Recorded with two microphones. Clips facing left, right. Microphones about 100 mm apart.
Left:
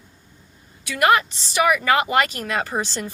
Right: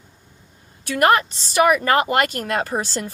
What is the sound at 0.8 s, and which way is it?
Speech, 45° right (ahead or behind).